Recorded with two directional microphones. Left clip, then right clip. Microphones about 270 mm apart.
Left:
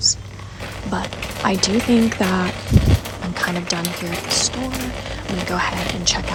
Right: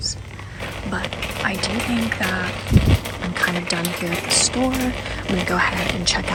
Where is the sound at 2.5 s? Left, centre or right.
Centre.